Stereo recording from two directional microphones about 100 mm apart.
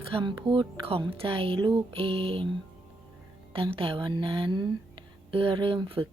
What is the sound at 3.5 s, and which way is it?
A woman's voice, 65° right (ahead or behind).